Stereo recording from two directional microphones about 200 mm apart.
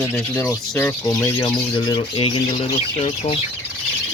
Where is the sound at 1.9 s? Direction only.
25° left (ahead or behind).